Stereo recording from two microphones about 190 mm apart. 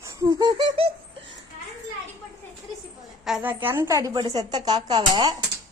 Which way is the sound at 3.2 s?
5° right (ahead or behind).